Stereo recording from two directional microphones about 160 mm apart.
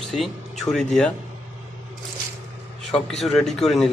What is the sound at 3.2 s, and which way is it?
Speech, centre (ahead or behind).